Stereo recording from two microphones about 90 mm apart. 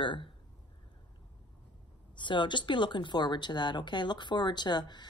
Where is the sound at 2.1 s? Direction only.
60° left (ahead or behind).